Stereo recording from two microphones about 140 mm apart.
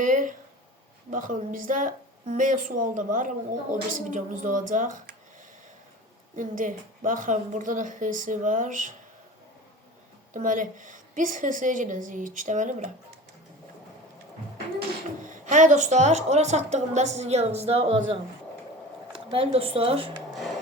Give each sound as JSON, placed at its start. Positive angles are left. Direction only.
{"t": 0.0, "sound": "a sound", "side_deg": -70}
{"t": 1.1, "sound": "a woman's voice", "side_deg": -70}
{"t": 6.3, "sound": "a woman's voice", "side_deg": -65}
{"t": 10.3, "sound": "a woman's voice", "side_deg": -65}
{"t": 15.2, "sound": "a woman's voice", "side_deg": -65}